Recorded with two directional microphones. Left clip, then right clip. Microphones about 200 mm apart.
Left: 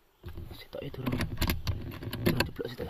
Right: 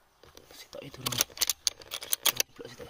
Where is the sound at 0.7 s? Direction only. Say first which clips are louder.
Left 4 dB; 25° left (ahead or behind).